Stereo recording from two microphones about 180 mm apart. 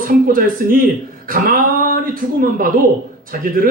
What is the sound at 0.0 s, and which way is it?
A man's voice, 50° right (ahead or behind).